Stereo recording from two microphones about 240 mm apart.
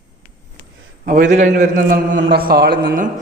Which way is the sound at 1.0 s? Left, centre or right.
Right.